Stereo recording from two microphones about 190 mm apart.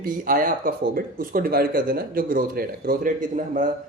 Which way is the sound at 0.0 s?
45° right (ahead or behind).